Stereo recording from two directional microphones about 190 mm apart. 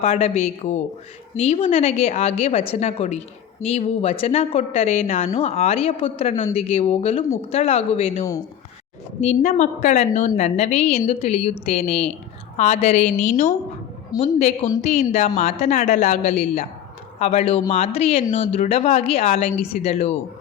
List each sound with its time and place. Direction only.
0.0 s speech: 35° left (ahead or behind)
9.2 s speech: 35° left (ahead or behind)